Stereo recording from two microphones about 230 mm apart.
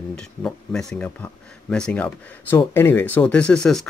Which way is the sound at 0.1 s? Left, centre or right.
Centre.